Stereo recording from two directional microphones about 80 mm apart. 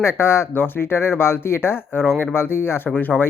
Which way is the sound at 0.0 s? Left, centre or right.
Left.